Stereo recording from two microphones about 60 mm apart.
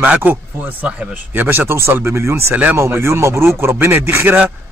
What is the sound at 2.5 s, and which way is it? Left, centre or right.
Speech, right.